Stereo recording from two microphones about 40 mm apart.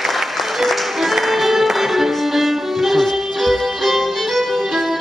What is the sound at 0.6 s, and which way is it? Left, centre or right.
Music, centre.